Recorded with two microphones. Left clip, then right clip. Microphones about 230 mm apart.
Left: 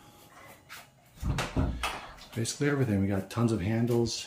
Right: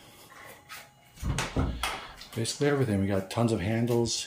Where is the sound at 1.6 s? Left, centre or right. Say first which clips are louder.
Right 2 dB; right.